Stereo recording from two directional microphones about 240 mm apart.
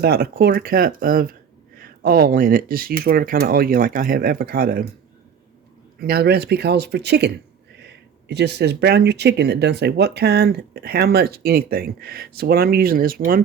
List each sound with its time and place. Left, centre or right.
0.0 s speech: right
6.0 s speech: right